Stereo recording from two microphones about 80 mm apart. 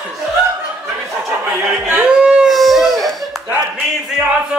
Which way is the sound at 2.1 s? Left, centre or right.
Centre.